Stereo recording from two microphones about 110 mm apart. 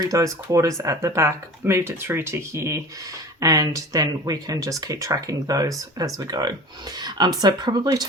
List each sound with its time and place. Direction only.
0.0 s speech: 30° right (ahead or behind)